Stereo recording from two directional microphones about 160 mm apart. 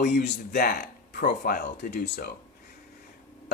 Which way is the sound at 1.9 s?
90° left.